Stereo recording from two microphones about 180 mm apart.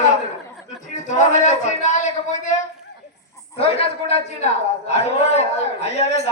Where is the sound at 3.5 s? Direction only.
35° left (ahead or behind).